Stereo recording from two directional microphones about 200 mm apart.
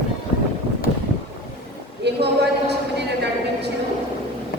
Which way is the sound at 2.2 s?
55° right (ahead or behind).